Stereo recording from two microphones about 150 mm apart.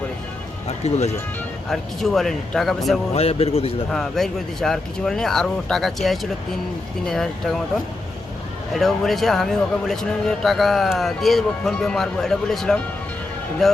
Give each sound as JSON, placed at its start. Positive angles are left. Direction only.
{"t": 0.9, "sound": "speech", "side_deg": 45}
{"t": 1.7, "sound": "a man's voice", "side_deg": 0}
{"t": 3.2, "sound": "speech", "side_deg": 40}
{"t": 3.9, "sound": "a man's voice", "side_deg": 0}
{"t": 8.7, "sound": "a man's voice", "side_deg": 0}